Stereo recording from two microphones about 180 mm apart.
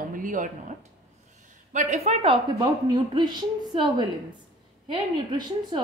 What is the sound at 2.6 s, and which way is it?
Speech, 25° right (ahead or behind).